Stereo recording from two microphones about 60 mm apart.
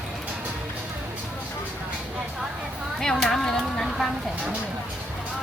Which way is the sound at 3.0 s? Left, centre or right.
Centre.